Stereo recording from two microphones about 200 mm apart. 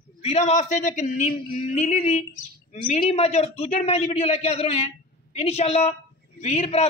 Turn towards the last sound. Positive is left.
turn(degrees=30)  # may be behind; listen again after turning